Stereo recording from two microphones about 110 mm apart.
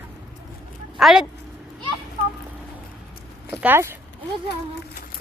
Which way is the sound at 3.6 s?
20° right (ahead or behind).